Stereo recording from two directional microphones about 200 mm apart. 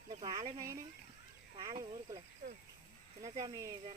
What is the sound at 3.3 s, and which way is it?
Speech, 20° right (ahead or behind).